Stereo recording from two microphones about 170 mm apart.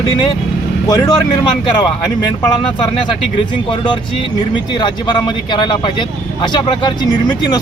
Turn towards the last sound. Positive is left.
turn(degrees=25)  # may be behind; listen again after turning